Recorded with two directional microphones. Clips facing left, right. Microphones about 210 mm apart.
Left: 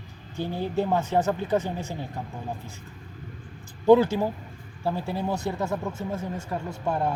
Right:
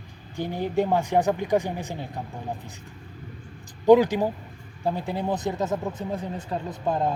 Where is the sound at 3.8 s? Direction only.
15° right (ahead or behind).